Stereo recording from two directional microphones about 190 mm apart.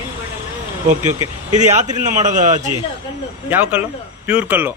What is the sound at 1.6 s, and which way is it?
Speech, 40° right (ahead or behind).